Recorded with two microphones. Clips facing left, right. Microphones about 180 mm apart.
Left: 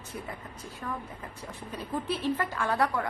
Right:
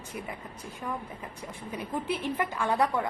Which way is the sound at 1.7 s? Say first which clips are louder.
Right 1 dB; 10° right (ahead or behind).